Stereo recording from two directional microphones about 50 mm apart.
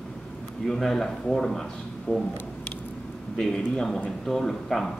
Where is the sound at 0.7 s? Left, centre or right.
Centre.